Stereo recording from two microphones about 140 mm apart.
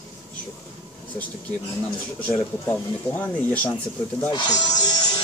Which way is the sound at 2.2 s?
10° left (ahead or behind).